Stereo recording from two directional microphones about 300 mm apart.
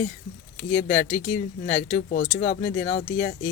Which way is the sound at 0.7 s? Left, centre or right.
Centre.